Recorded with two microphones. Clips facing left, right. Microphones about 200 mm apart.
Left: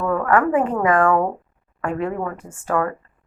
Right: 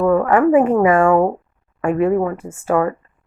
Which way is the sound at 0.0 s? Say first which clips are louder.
Right 5 dB; 25° right (ahead or behind).